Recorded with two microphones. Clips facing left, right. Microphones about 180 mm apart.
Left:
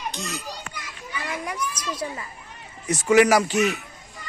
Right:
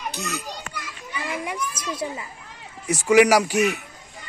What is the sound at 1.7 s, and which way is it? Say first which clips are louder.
Speech: right 1 dB; 25° right (ahead or behind).